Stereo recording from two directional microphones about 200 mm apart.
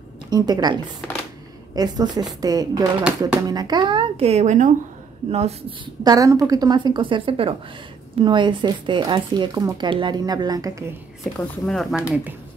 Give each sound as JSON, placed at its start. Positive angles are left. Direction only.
{"t": 0.3, "sound": "speech", "side_deg": -20}
{"t": 1.8, "sound": "speech", "side_deg": -20}
{"t": 3.0, "sound": "speech", "side_deg": -5}
{"t": 3.4, "sound": "speech", "side_deg": -20}
{"t": 6.0, "sound": "speech", "side_deg": -15}
{"t": 11.3, "sound": "speech", "side_deg": 5}